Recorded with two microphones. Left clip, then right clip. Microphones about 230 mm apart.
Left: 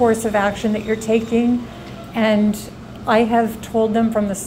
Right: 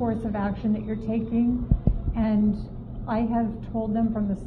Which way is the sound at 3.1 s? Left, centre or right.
Left.